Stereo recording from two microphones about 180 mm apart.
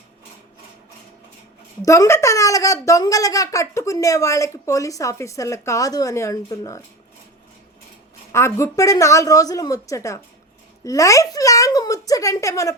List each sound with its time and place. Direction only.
1.8 s a woman's voice: 15° left (ahead or behind)
8.3 s a woman's voice: 15° left (ahead or behind)
10.8 s a sound: 20° left (ahead or behind)